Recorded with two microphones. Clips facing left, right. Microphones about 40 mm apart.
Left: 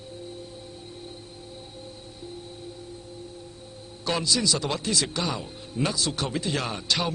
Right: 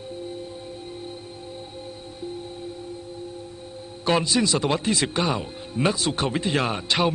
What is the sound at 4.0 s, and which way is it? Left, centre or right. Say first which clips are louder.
Speech: right 5 dB; right.